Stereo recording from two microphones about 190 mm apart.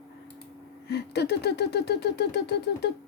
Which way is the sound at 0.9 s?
60° left (ahead or behind).